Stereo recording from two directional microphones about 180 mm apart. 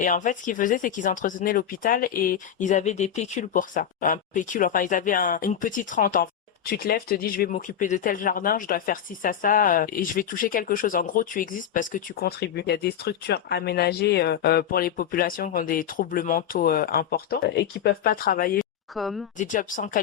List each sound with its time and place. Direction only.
0.0 s speech: 45° left (ahead or behind)
18.9 s speech: centre (ahead or behind)
19.4 s speech: 45° left (ahead or behind)